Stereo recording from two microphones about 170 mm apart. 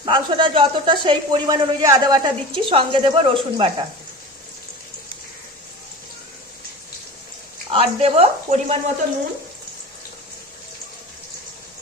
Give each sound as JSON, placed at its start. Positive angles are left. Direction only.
{"t": 0.0, "sound": "speech", "side_deg": -25}
{"t": 7.7, "sound": "speech", "side_deg": -35}